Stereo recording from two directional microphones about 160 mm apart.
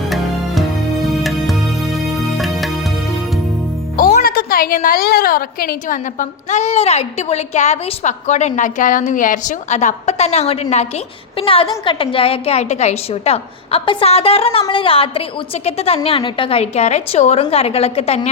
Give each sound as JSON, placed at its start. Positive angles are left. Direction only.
{"t": 1.0, "sound": "music", "side_deg": 0}
{"t": 3.9, "sound": "a woman's voice", "side_deg": 60}